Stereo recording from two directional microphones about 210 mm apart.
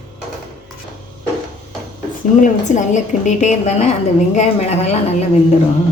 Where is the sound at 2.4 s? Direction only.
35° left (ahead or behind).